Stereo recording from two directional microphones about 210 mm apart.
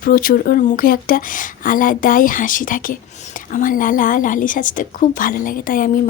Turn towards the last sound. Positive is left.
turn(degrees=40)  # may be behind; listen again after turning